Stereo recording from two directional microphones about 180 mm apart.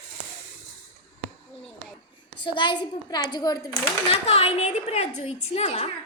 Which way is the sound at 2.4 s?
25° left (ahead or behind).